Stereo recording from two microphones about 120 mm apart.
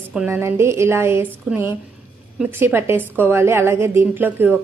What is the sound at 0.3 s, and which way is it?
A woman's voice, 20° right (ahead or behind).